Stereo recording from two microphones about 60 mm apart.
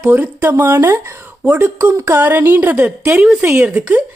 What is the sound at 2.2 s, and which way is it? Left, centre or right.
Speech, right.